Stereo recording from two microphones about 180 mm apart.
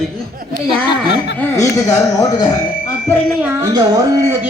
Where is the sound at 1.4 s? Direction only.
20° left (ahead or behind).